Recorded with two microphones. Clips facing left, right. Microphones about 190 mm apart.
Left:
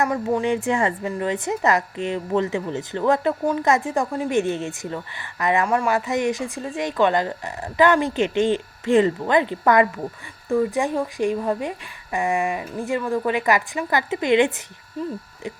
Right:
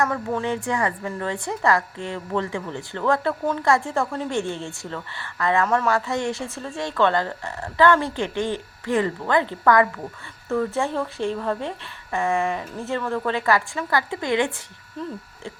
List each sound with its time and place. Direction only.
0.0 s a woman's voice: 15° left (ahead or behind)